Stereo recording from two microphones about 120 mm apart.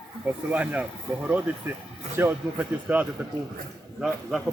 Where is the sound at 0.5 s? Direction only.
10° right (ahead or behind).